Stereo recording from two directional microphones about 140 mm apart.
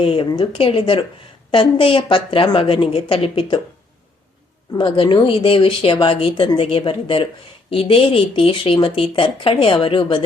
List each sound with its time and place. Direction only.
0.0 s speech: 40° left (ahead or behind)
4.8 s speech: 35° left (ahead or behind)